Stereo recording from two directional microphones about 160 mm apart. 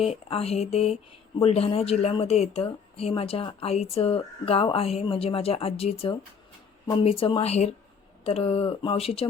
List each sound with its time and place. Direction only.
0.0 s speech: 40° left (ahead or behind)